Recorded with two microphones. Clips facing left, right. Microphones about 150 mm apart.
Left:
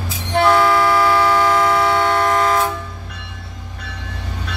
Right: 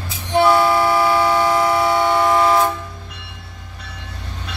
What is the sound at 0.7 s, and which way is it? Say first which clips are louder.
Siren: left 1 dB; 20° right (ahead or behind).